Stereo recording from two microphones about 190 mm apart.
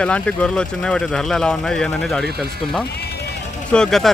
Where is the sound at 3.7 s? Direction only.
5° left (ahead or behind).